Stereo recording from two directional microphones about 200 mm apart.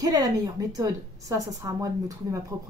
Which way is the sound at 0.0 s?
20° right (ahead or behind).